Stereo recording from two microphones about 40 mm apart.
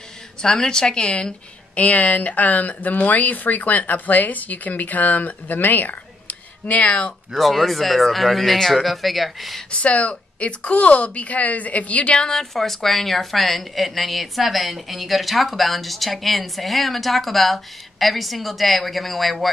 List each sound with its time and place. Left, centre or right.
0.4 s a woman's voice: centre
1.8 s speech: left
7.3 s a woman's voice: centre
9.7 s a woman's voice: left
12.5 s a woman's voice: centre